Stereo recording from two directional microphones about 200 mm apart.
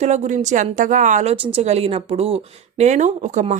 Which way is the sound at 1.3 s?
25° right (ahead or behind).